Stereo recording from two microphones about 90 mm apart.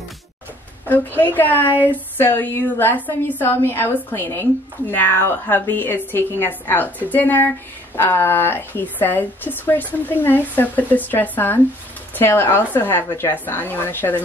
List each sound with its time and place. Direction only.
0.8 s speech: 20° left (ahead or behind)